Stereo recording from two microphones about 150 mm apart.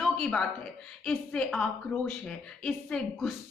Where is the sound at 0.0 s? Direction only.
5° left (ahead or behind).